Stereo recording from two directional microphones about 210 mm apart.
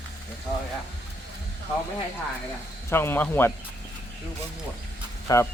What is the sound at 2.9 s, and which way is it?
Speech, 10° left (ahead or behind).